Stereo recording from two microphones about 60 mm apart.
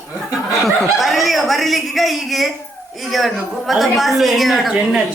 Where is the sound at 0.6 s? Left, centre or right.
Centre.